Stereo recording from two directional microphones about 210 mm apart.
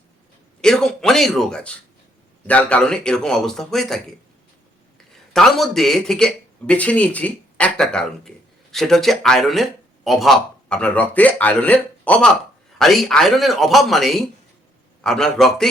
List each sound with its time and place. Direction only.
0.6 s speech: centre (ahead or behind)
5.3 s speech: centre (ahead or behind)